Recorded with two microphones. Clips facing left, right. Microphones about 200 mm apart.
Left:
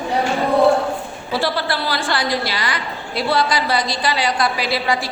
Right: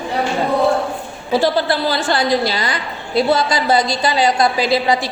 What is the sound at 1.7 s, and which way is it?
Speech, 25° right (ahead or behind).